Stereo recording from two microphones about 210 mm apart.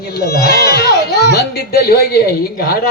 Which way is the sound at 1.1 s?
55° right (ahead or behind).